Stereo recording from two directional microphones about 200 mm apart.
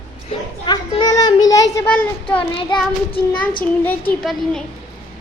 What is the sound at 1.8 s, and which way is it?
Speech, 5° left (ahead or behind).